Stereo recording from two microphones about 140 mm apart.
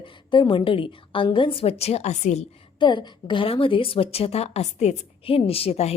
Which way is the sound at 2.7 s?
35° left (ahead or behind).